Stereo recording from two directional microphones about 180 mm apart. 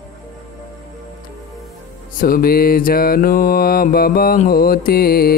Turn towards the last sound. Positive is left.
turn(degrees=55)  # may be behind; listen again after turning